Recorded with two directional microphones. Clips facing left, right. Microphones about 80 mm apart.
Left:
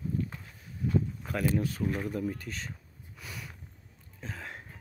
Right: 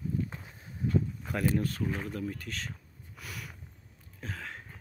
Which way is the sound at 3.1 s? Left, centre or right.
Centre.